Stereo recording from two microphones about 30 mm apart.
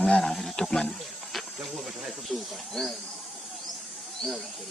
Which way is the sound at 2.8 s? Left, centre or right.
Left.